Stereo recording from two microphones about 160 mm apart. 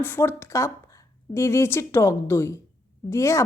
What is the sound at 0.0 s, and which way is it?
Speech, 15° left (ahead or behind).